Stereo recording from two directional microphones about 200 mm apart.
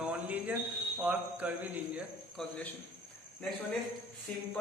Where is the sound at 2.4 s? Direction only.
5° left (ahead or behind).